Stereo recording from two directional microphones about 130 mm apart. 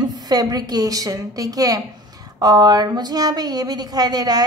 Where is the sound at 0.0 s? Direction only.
30° right (ahead or behind).